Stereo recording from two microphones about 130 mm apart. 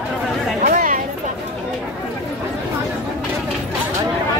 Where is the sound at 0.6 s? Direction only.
75° right (ahead or behind).